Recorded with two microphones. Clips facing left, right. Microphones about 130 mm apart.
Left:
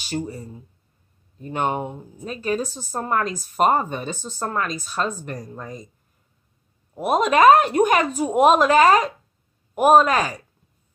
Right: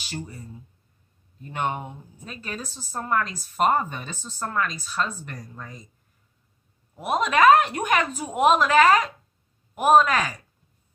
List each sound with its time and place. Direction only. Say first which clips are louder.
0.1 s a woman's voice: left 8 dB; 35° left (ahead or behind)
1.7 s a woman's voice: left 5 dB; 35° left (ahead or behind)
7.0 s a woman's voice: left 4 dB; 40° left (ahead or behind)